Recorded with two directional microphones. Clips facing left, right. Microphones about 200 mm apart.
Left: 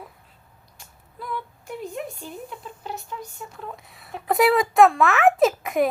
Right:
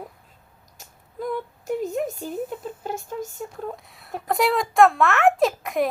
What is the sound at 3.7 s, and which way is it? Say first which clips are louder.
A child's voice: right 3 dB; centre (ahead or behind).